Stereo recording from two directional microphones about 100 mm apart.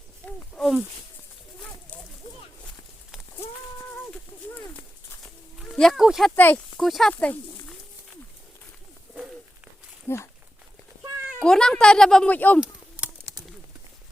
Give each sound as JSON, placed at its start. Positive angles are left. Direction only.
{"t": 0.5, "sound": "a sound", "side_deg": -10}
{"t": 1.5, "sound": "bird", "side_deg": 10}
{"t": 5.7, "sound": "speech", "side_deg": 5}
{"t": 6.3, "sound": "speech", "side_deg": 20}
{"t": 6.7, "sound": "speech", "side_deg": 0}
{"t": 7.1, "sound": "speech", "side_deg": 15}
{"t": 10.1, "sound": "speech", "side_deg": 25}
{"t": 11.3, "sound": "speech", "side_deg": 5}